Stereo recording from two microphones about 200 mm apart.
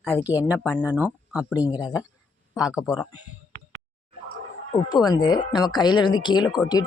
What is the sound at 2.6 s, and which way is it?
Speech, 5° right (ahead or behind).